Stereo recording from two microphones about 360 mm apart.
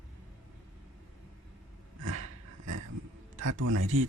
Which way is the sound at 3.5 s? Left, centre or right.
Right.